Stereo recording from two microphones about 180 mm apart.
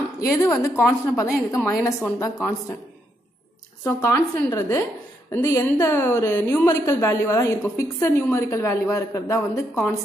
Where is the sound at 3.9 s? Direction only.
15° left (ahead or behind).